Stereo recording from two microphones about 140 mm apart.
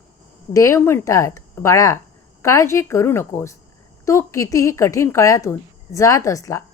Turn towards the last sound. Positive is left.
turn(degrees=25)  # may be behind; listen again after turning